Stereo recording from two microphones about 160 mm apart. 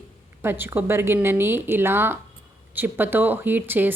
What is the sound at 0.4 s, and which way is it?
Speech, 15° right (ahead or behind).